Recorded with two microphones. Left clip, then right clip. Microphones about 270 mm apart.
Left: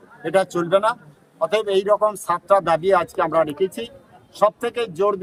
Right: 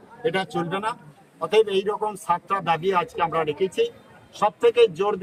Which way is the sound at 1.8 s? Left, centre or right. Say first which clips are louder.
Left 6 dB; centre.